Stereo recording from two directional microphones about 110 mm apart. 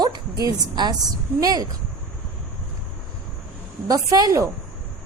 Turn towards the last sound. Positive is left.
turn(degrees=-30)  # may be behind; listen again after turning